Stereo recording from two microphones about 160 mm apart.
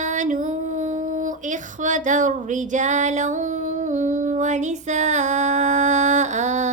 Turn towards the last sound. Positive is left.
turn(degrees=-50)  # may be behind; listen again after turning